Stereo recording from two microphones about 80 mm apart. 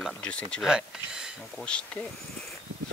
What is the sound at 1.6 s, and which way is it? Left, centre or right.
Speech, centre.